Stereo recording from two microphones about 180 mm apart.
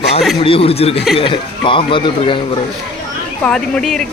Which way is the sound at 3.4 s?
5° left (ahead or behind).